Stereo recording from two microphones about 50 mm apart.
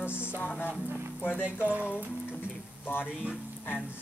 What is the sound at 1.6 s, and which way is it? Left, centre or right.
Speech, right.